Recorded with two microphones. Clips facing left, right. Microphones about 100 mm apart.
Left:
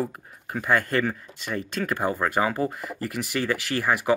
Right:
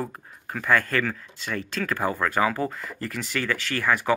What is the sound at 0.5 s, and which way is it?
Speech, 25° left (ahead or behind).